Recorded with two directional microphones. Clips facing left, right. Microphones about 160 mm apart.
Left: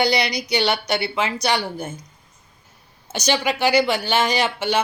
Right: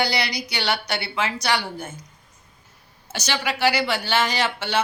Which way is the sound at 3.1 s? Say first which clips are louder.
Left 5 dB; 20° left (ahead or behind).